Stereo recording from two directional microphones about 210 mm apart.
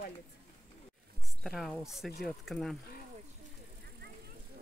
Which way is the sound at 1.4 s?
Centre (ahead or behind).